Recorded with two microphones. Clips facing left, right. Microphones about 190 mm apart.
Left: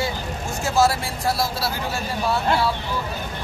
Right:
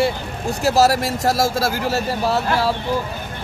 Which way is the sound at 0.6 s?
40° right (ahead or behind).